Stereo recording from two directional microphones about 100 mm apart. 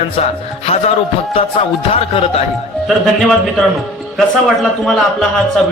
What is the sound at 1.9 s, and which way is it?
Music, 80° left.